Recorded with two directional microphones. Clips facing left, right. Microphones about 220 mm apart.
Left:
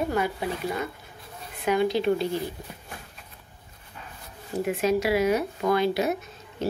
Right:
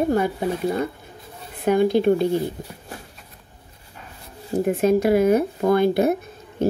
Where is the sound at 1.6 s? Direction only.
50° right (ahead or behind).